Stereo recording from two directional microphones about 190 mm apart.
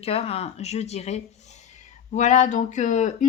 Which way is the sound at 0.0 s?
30° left (ahead or behind).